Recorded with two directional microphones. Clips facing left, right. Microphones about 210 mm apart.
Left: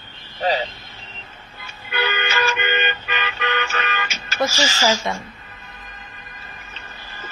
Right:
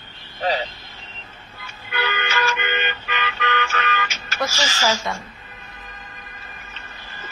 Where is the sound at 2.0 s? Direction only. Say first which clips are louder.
Left 2 dB; 20° left (ahead or behind).